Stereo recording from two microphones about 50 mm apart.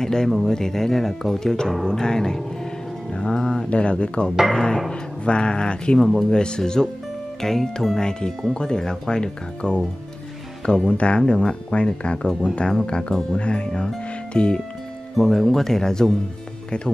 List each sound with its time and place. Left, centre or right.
0.0 s speech: centre
4.5 s speech: centre
5.2 s speech: left
15.1 s speech: centre